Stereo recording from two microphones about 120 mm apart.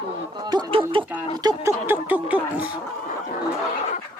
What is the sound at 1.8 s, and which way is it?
Speech, 15° right (ahead or behind).